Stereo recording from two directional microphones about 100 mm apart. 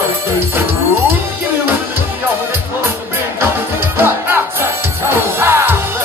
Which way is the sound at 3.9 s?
25° right (ahead or behind).